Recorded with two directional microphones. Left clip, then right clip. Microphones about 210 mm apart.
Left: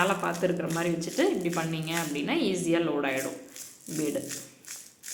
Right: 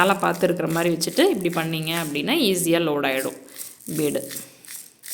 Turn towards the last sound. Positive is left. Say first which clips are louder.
# right 7 dB
turn(degrees=-45)  # may be behind; listen again after turning